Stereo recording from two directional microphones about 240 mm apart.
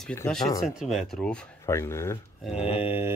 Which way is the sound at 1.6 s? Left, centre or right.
Centre.